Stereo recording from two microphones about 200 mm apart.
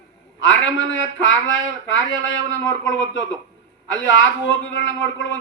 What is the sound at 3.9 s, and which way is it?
Speech, 70° left (ahead or behind).